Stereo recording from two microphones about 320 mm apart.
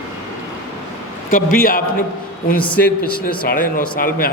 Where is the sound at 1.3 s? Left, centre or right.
Left.